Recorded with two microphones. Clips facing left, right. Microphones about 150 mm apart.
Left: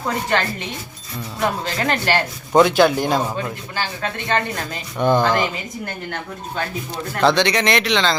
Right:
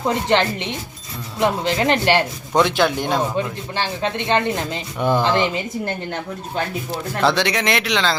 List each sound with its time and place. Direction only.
0.1 s a man's voice: 20° right (ahead or behind)
2.6 s speech: centre (ahead or behind)
3.3 s a man's voice: 20° right (ahead or behind)
4.9 s speech: 5° right (ahead or behind)
7.2 s speech: 5° right (ahead or behind)